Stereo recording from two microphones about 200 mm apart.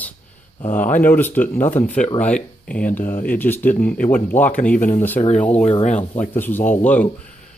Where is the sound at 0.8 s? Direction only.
40° left (ahead or behind).